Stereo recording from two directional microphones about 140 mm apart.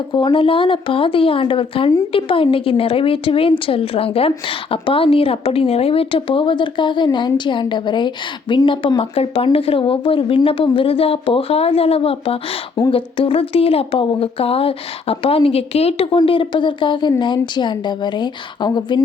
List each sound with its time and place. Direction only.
0.1 s speech: 35° left (ahead or behind)